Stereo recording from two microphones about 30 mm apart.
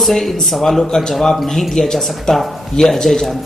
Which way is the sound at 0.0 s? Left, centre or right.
Centre.